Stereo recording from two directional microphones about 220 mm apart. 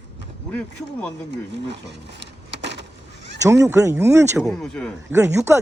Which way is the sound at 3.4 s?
15° right (ahead or behind).